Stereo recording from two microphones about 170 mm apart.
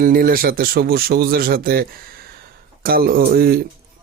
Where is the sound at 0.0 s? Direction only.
55° right (ahead or behind).